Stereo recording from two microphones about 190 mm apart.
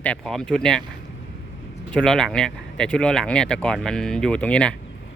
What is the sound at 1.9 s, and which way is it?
Speech, 5° left (ahead or behind).